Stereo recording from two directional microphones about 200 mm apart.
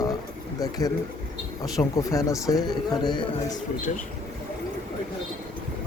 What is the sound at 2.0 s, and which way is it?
Speech, 15° left (ahead or behind).